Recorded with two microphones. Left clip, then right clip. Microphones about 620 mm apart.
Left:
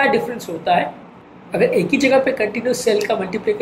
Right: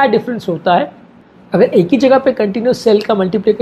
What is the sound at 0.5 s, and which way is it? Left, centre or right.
A woman's voice, right.